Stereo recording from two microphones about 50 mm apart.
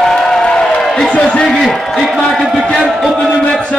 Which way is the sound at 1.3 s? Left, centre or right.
Centre.